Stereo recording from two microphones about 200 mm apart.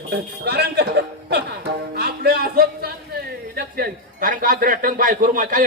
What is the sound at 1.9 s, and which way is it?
A man's voice, 50° right (ahead or behind).